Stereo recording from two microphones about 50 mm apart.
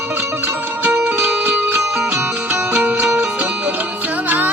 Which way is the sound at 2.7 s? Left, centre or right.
Right.